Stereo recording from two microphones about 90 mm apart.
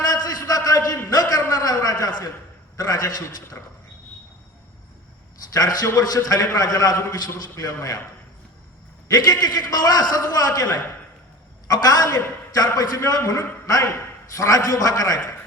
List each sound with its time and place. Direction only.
0.0 s a sound: 50° left (ahead or behind)
2.7 s a man's voice: 45° left (ahead or behind)
5.5 s a man's voice: 45° left (ahead or behind)
9.1 s a man's voice: 50° left (ahead or behind)